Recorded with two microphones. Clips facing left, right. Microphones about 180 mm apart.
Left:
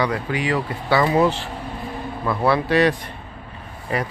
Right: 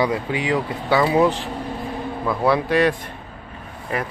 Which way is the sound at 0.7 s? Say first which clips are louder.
Even; centre (ahead or behind).